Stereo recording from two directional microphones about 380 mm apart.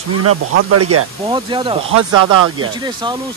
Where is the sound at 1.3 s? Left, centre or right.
Centre.